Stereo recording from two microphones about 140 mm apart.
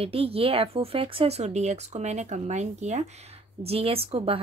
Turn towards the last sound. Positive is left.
turn(degrees=-45)  # may be behind; listen again after turning